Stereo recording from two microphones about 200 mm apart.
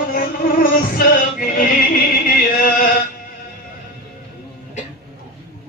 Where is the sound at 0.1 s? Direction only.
45° left (ahead or behind).